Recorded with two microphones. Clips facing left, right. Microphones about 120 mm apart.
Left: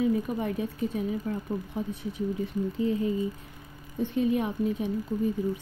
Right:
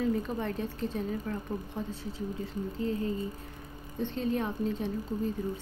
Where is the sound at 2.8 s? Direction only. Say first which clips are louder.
Left 4 dB; 15° left (ahead or behind).